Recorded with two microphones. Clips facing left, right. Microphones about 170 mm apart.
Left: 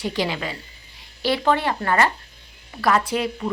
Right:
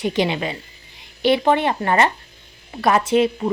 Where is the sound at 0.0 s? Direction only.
20° right (ahead or behind).